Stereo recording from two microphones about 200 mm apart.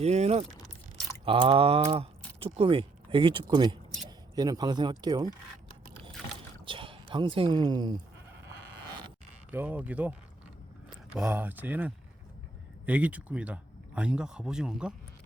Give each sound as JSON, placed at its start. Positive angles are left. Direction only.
{"t": 0.0, "sound": "speech", "side_deg": -35}
{"t": 6.7, "sound": "speech", "side_deg": -25}
{"t": 8.4, "sound": "sheep", "side_deg": -20}
{"t": 9.5, "sound": "speech", "side_deg": -10}